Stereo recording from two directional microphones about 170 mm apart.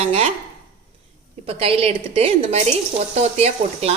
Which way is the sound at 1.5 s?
35° right (ahead or behind).